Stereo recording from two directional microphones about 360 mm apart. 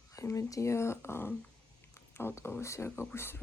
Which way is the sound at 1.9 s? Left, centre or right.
Centre.